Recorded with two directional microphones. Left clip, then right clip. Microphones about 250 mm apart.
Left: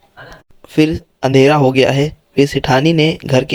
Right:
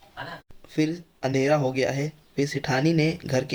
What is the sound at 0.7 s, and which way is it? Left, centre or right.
Speech, left.